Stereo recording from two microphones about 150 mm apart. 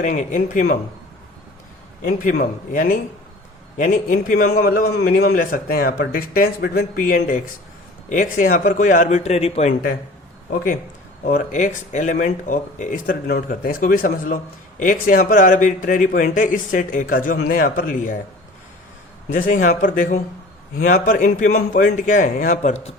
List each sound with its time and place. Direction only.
0.0 s speech: 55° left (ahead or behind)
2.0 s a man's voice: 65° left (ahead or behind); by 9.7 s 45° left (ahead or behind)
11.2 s speech: 70° left (ahead or behind)
19.3 s speech: 60° left (ahead or behind)